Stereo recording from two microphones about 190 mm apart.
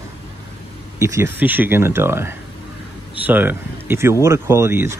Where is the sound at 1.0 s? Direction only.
15° right (ahead or behind).